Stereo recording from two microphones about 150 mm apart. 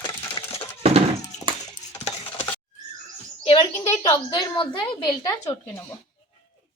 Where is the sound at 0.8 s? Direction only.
45° right (ahead or behind).